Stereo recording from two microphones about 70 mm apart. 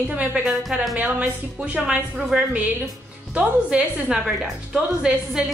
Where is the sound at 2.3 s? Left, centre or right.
Centre.